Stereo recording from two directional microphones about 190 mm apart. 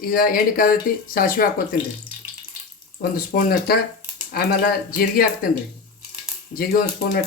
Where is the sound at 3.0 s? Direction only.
50° left (ahead or behind).